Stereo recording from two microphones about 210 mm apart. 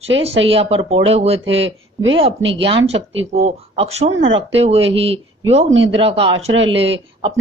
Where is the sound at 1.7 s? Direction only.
65° right (ahead or behind).